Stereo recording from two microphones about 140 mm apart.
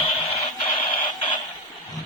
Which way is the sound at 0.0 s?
40° left (ahead or behind).